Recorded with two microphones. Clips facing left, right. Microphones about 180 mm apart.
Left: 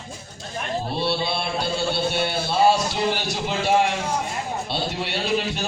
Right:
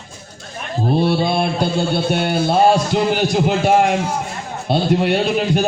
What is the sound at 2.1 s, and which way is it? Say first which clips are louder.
A man's voice: right 7 dB; 50° right (ahead or behind).